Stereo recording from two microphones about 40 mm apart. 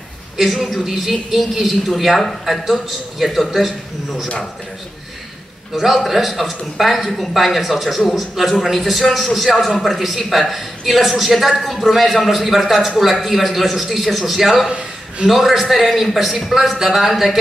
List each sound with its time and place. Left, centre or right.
0.7 s a man's voice: centre
5.8 s a man's voice: centre
14.7 s a sound: right
15.2 s a man's voice: centre